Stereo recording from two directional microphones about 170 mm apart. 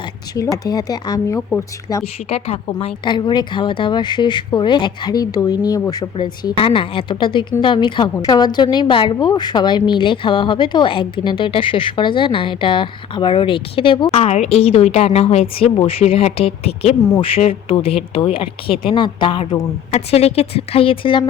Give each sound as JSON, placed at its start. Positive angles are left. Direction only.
{"t": 0.5, "sound": "a woman's voice", "side_deg": 20}
{"t": 2.3, "sound": "a woman's voice", "side_deg": 35}